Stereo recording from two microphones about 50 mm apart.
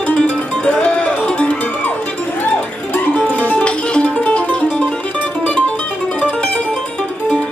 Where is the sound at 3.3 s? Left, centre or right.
Left.